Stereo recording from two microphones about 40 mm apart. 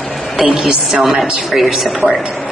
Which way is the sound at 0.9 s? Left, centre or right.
Centre.